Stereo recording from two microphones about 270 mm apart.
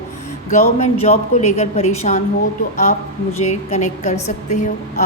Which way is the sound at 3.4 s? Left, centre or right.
Left.